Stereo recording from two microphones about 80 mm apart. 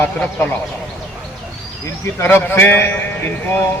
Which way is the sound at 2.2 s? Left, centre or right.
Left.